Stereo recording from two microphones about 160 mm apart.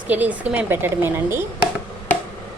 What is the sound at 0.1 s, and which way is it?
A woman's voice, 10° right (ahead or behind).